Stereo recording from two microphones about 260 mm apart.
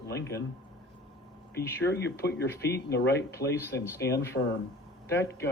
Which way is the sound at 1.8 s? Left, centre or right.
Left.